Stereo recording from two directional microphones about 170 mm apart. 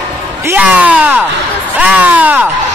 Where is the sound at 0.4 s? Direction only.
10° right (ahead or behind).